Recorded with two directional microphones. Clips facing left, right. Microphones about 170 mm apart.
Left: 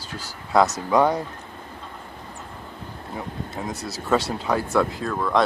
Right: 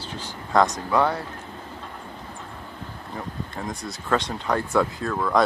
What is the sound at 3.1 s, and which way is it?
Speech, 5° left (ahead or behind).